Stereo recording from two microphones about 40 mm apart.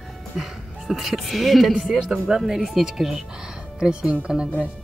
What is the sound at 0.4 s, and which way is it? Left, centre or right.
A woman's voice, centre.